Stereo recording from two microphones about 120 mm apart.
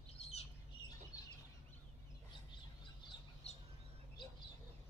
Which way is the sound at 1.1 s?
30° left (ahead or behind).